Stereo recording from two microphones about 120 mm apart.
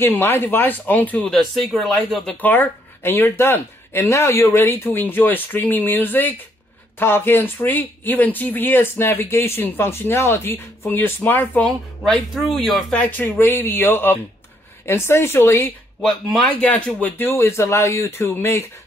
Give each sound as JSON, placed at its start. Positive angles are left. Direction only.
{"t": 0.0, "sound": "speech", "side_deg": 20}
{"t": 2.4, "sound": "speech", "side_deg": 15}
{"t": 12.0, "sound": "speech", "side_deg": 0}
{"t": 13.0, "sound": "speech", "side_deg": 15}
{"t": 16.0, "sound": "speech", "side_deg": 0}
{"t": 16.6, "sound": "speech", "side_deg": 15}